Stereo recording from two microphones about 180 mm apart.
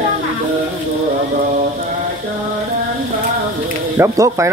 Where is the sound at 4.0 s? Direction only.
15° right (ahead or behind).